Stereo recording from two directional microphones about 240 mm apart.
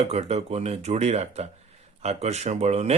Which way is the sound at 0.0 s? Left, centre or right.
Right.